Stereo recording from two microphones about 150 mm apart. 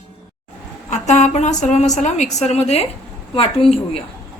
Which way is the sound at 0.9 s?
50° left (ahead or behind).